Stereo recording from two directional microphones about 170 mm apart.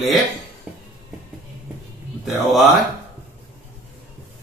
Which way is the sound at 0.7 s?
5° right (ahead or behind).